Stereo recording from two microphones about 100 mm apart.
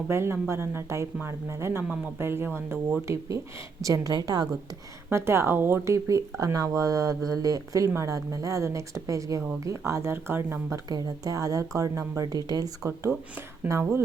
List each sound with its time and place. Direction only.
0.1 s speech: 25° right (ahead or behind); by 4.4 s 40° right (ahead or behind)
5.1 s speech: 25° right (ahead or behind)
10.8 s speech: 40° right (ahead or behind)